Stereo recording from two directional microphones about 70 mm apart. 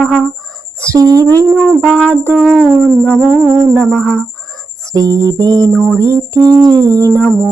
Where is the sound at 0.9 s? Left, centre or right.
Right.